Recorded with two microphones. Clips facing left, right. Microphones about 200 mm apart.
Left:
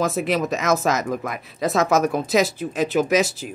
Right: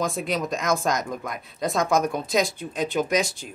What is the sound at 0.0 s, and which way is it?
Speech, 5° left (ahead or behind).